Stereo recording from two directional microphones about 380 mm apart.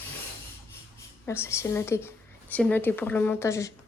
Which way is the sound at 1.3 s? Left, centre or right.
Centre.